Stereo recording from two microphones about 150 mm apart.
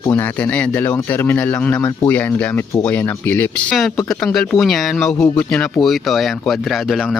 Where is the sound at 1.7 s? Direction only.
25° left (ahead or behind).